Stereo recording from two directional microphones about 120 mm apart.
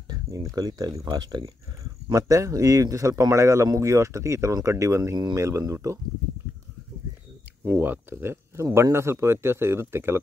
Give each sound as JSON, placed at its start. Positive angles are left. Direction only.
{"t": 0.1, "sound": "a sound", "side_deg": -30}
{"t": 0.6, "sound": "speech", "side_deg": -30}
{"t": 7.6, "sound": "speech", "side_deg": -20}